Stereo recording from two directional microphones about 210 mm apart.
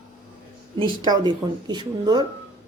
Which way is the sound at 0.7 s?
20° right (ahead or behind).